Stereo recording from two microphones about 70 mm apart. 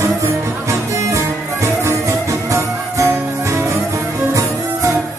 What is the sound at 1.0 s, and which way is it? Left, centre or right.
Music, right.